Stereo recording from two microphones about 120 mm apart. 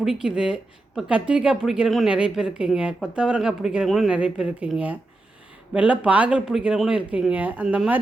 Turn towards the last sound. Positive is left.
turn(degrees=-10)  # may be behind; listen again after turning